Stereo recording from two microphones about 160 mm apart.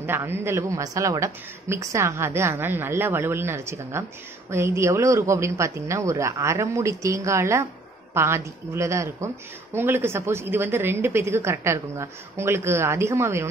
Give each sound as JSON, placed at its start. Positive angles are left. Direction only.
{"t": 0.0, "sound": "a woman's voice", "side_deg": -15}